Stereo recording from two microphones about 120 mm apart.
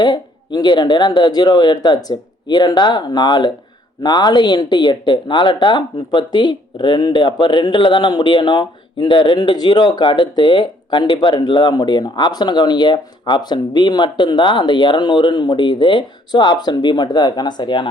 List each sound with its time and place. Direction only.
0.0 s speech: 35° left (ahead or behind)